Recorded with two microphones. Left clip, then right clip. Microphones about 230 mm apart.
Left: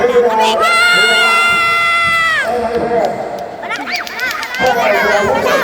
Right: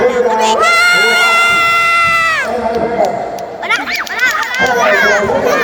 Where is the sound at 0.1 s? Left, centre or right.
Centre.